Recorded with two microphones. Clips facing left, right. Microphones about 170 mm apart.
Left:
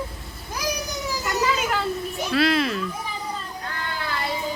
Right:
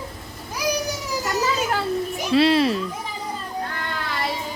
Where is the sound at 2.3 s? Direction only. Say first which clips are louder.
Right 4 dB; 30° right (ahead or behind).